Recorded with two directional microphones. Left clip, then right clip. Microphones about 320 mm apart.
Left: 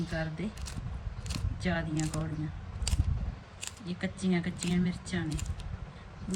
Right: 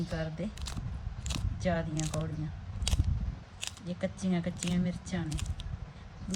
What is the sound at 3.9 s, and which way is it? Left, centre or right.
A woman's voice, centre.